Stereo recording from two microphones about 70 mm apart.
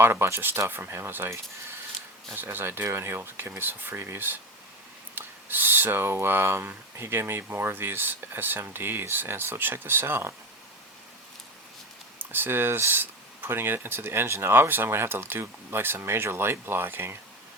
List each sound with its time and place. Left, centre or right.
0.0 s speech: right
12.2 s speech: right